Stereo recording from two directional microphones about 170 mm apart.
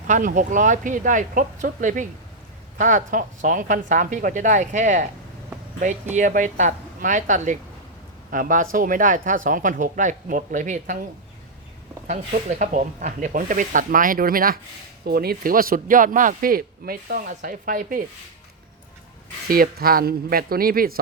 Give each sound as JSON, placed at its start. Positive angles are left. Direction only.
{"t": 0.1, "sound": "speech", "side_deg": -50}
{"t": 6.1, "sound": "speech", "side_deg": -50}
{"t": 12.0, "sound": "a man's voice", "side_deg": -45}
{"t": 19.5, "sound": "a man's voice", "side_deg": -60}